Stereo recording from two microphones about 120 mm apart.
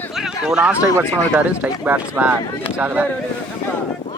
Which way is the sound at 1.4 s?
10° right (ahead or behind).